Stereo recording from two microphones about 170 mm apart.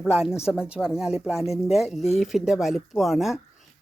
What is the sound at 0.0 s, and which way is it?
Speech, 5° right (ahead or behind).